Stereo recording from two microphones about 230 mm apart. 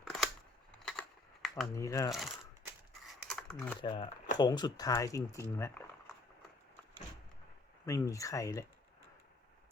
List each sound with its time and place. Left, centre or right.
0.0 s scissors: centre
0.8 s a sound: centre
1.7 s speech: centre
2.0 s speech: centre
3.1 s a sound: centre
3.8 s speech: left
7.9 s speech: centre